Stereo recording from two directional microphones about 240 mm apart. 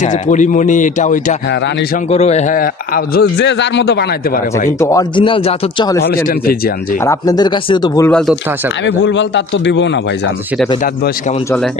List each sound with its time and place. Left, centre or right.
0.0 s a man's voice: left
4.6 s speech: centre
7.1 s speech: centre
8.8 s a man's voice: left